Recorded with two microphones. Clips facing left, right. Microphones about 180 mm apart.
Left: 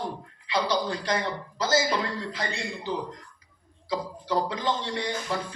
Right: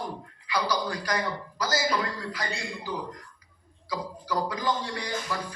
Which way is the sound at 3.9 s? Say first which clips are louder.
Left 3 dB; 25° left (ahead or behind).